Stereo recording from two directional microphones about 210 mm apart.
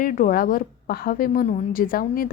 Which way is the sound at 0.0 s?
40° left (ahead or behind).